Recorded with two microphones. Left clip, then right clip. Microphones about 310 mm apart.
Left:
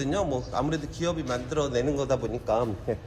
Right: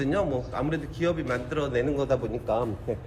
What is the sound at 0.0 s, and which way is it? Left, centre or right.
A man's voice, centre.